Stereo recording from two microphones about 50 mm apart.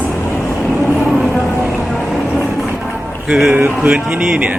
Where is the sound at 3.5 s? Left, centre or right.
Right.